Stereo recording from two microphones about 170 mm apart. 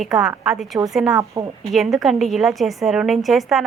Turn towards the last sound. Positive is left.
turn(degrees=0)  # may be behind; listen again after turning